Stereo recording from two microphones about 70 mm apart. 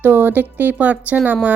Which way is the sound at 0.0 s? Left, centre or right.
Right.